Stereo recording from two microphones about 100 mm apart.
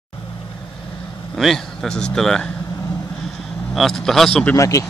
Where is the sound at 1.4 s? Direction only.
Centre (ahead or behind).